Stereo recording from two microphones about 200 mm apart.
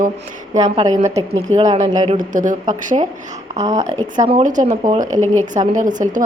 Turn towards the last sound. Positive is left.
turn(degrees=-40)  # may be behind; listen again after turning